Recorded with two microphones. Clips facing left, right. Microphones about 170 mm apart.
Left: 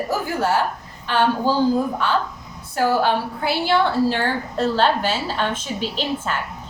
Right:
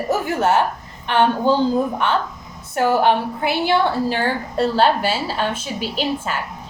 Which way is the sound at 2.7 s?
20° right (ahead or behind).